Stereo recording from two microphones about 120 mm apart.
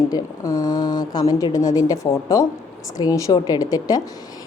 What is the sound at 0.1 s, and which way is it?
A woman's voice, 30° left (ahead or behind).